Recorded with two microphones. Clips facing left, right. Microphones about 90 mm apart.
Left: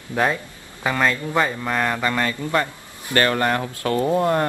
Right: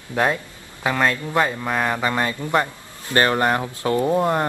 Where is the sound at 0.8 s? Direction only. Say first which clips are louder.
Even; 5° right (ahead or behind).